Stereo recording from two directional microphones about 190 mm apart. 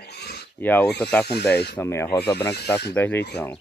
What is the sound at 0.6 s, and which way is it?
Speech, 10° left (ahead or behind).